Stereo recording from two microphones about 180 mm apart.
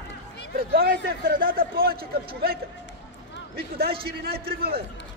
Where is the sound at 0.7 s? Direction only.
55° right (ahead or behind).